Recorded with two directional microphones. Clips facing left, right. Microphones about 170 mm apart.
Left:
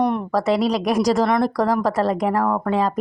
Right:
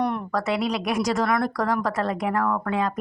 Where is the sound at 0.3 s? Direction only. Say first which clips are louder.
Left 6 dB; 35° left (ahead or behind).